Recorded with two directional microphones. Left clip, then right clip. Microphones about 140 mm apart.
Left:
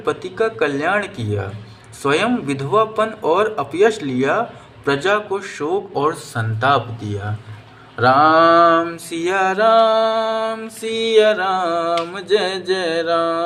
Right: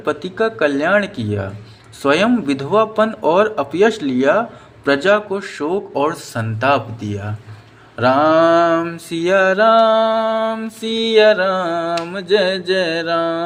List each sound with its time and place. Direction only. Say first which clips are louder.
0.0 s a man's voice: right 1 dB; 45° right (ahead or behind)
4.9 s mantra: right 3 dB; 45° right (ahead or behind)